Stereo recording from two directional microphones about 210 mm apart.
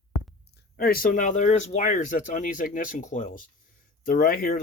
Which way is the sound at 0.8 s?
45° left (ahead or behind).